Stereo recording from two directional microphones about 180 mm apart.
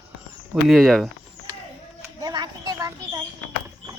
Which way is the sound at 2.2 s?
20° right (ahead or behind).